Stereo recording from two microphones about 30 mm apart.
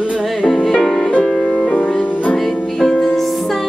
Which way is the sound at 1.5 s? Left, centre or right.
Left.